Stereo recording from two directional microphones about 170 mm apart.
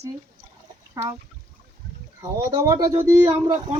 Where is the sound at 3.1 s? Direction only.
15° right (ahead or behind).